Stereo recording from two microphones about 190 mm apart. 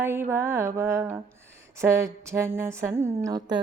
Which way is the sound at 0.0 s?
10° right (ahead or behind).